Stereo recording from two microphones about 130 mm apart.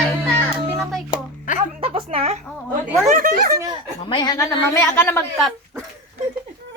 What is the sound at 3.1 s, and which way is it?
Speech, 90° right.